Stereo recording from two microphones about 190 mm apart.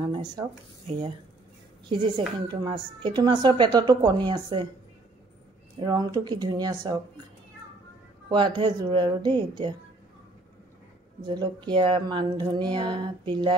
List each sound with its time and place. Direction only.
0.0 s a woman's voice: 20° right (ahead or behind)
5.8 s a woman's voice: 20° right (ahead or behind)
8.3 s a woman's voice: 25° right (ahead or behind)
11.1 s a woman's voice: 25° right (ahead or behind)